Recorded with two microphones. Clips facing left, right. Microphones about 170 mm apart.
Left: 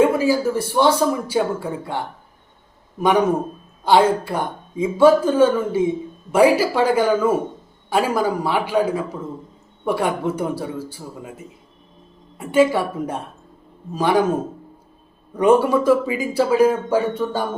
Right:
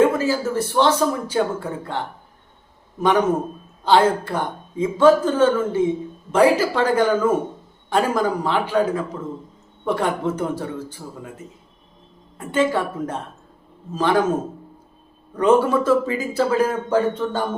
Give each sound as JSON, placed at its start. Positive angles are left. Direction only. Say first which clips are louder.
{"t": 0.1, "sound": "speech", "louder": "left 3 dB", "side_deg": 10}
{"t": 15.4, "sound": "speech", "louder": "left 1 dB", "side_deg": 10}